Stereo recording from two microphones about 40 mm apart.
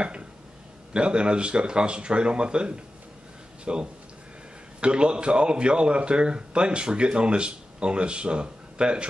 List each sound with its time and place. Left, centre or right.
0.9 s a man's voice: right